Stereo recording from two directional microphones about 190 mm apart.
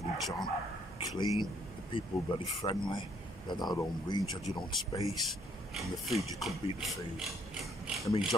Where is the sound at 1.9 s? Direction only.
25° left (ahead or behind).